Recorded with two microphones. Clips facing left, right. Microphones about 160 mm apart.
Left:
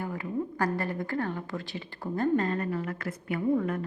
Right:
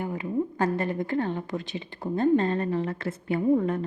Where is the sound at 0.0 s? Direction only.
20° right (ahead or behind).